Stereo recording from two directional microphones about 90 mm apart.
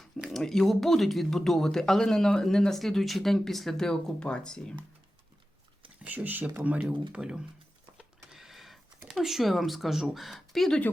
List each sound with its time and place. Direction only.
0.2 s speech: centre (ahead or behind)
6.0 s speech: 20° right (ahead or behind)
7.9 s a sound: 5° right (ahead or behind)
10.2 s speech: centre (ahead or behind)